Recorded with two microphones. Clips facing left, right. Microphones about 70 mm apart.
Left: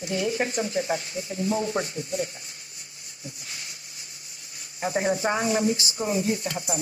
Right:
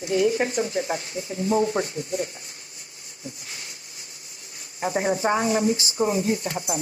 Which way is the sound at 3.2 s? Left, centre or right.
Right.